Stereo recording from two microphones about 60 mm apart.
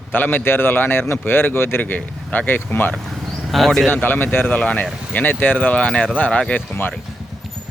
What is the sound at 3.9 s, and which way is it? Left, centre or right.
Speech, left.